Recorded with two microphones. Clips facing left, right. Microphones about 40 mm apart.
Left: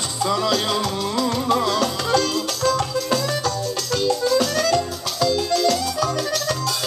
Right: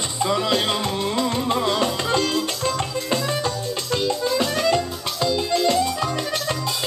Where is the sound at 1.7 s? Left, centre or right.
Right.